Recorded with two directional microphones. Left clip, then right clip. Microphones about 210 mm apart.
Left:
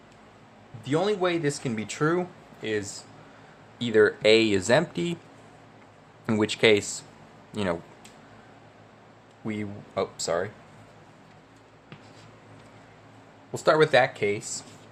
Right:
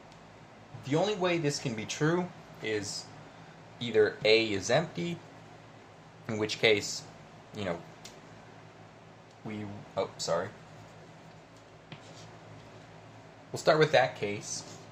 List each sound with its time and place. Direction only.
0.9 s speech: 45° left (ahead or behind)
3.8 s speech: 45° left (ahead or behind)
6.2 s speech: 45° left (ahead or behind)
9.5 s speech: 55° left (ahead or behind)
13.5 s speech: 35° left (ahead or behind)